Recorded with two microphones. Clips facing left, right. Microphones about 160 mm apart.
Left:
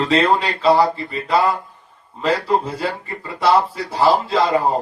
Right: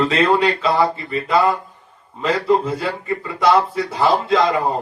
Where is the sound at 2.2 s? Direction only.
30° left (ahead or behind).